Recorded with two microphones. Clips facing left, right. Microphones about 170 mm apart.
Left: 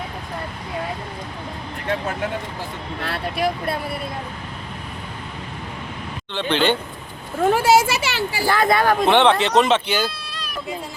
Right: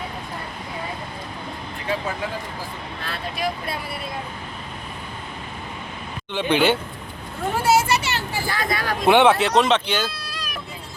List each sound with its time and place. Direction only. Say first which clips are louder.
3.0 s speech: left 5 dB; 65° left (ahead or behind)
6.3 s speech: right 1 dB; 10° right (ahead or behind)
7.5 s speech: left 1 dB; 90° left
8.5 s speech: left 9 dB; 55° left (ahead or behind)
9.0 s speech: right 4 dB; 10° right (ahead or behind)